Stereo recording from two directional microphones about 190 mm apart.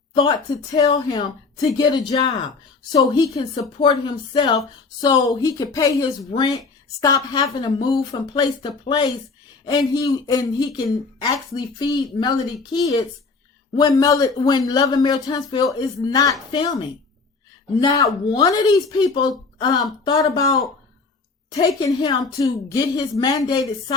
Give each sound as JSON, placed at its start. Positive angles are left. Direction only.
{"t": 0.1, "sound": "a woman's voice", "side_deg": 20}
{"t": 21.8, "sound": "a woman's voice", "side_deg": 20}